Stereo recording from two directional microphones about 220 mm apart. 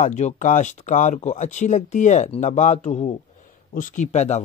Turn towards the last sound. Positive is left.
turn(degrees=30)  # may be behind; listen again after turning